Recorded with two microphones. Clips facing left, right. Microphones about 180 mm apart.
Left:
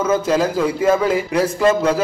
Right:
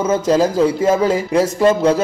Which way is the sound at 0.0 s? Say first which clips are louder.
Right 2 dB; 30° right (ahead or behind).